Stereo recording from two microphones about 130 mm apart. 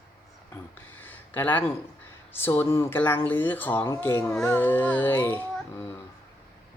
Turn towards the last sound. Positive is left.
turn(degrees=15)  # may be behind; listen again after turning